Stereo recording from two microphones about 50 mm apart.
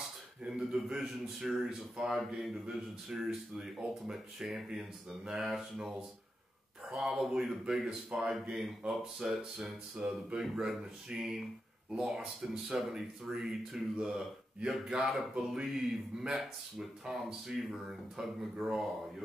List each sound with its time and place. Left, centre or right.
0.5 s speech: centre
10.0 s speech: centre